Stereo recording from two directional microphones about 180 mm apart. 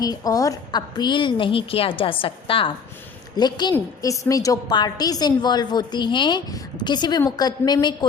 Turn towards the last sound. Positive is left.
turn(degrees=20)  # may be behind; listen again after turning